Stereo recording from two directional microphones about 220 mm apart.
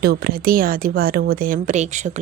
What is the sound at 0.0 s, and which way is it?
A woman's voice, 45° right (ahead or behind).